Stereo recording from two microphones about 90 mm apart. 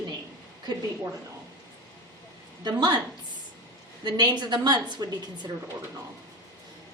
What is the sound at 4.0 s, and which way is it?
A woman's voice, 55° right (ahead or behind).